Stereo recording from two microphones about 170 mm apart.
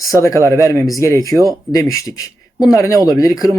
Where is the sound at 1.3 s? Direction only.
20° right (ahead or behind).